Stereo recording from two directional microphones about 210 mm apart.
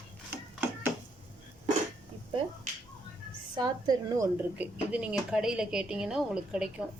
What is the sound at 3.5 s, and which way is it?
Speech, 20° right (ahead or behind).